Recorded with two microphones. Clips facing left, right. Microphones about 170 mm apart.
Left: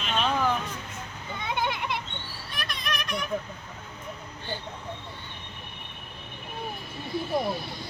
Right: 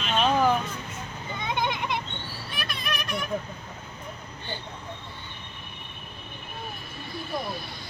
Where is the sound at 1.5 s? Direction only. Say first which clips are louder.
Right 1 dB; 5° left (ahead or behind).